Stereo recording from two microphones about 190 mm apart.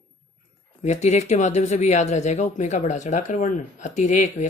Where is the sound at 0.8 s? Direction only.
35° left (ahead or behind).